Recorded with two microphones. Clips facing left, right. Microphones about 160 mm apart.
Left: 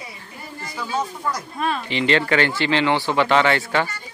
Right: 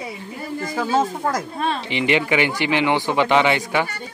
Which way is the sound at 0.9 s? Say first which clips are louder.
Right 4 dB; 90° right.